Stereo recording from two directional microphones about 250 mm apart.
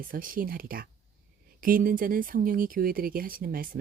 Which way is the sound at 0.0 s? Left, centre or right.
Right.